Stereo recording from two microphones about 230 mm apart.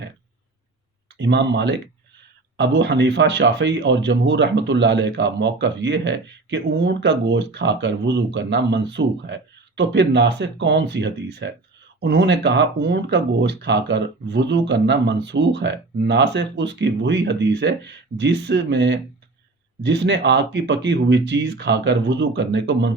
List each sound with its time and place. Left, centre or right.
1.2 s speech: right